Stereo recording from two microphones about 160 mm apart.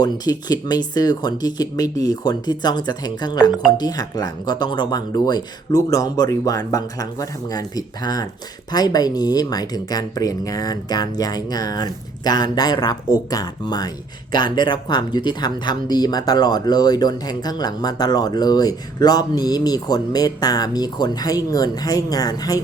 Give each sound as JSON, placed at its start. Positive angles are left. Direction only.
{"t": 0.0, "sound": "speech", "side_deg": 25}